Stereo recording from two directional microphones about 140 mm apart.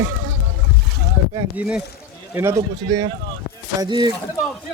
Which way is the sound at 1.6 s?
10° right (ahead or behind).